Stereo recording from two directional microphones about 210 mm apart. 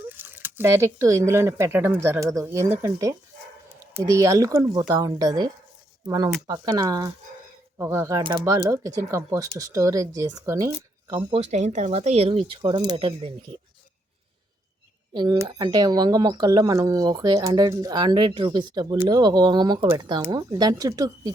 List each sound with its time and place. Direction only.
0.2 s speech: 10° right (ahead or behind)
11.5 s speech: 35° right (ahead or behind)
15.1 s speech: 20° right (ahead or behind)